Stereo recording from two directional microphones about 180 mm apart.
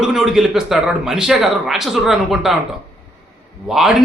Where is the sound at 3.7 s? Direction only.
Centre (ahead or behind).